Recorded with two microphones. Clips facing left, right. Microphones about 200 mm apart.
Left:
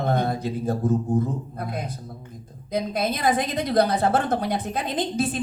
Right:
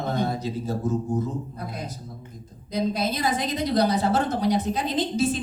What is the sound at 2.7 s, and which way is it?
A woman's voice, 55° left (ahead or behind).